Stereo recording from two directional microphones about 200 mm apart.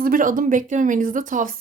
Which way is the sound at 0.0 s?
45° right (ahead or behind).